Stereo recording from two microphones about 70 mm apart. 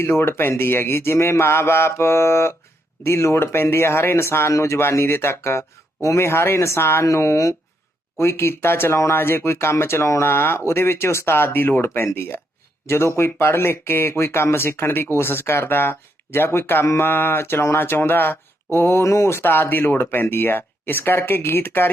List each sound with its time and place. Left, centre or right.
0.0 s speech: left